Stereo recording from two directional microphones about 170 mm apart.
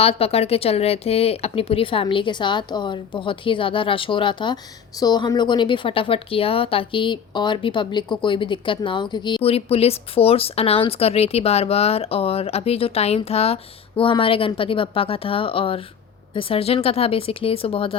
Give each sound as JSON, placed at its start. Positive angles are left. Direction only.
{"t": 0.0, "sound": "speech", "side_deg": 35}